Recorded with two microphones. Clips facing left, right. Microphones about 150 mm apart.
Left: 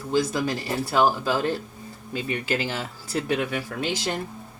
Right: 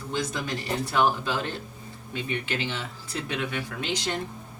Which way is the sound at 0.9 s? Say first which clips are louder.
Left 3 dB; 35° left (ahead or behind).